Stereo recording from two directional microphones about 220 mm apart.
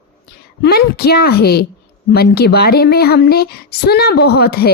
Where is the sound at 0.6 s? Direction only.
45° left (ahead or behind).